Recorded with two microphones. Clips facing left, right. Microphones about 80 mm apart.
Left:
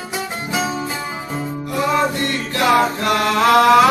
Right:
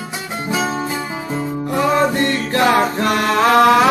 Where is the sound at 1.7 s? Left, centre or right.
Right.